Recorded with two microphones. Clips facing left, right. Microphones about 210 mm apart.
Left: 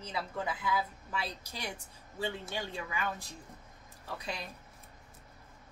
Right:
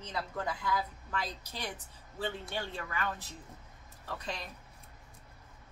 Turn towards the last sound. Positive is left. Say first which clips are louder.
# even
turn(degrees=10)  # may be behind; listen again after turning